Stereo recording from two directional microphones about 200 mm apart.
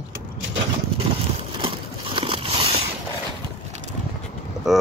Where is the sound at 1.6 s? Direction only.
25° right (ahead or behind).